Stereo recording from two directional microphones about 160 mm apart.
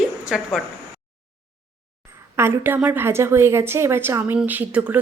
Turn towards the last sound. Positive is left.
turn(degrees=-10)  # may be behind; listen again after turning